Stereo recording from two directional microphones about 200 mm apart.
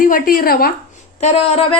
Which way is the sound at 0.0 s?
45° left (ahead or behind).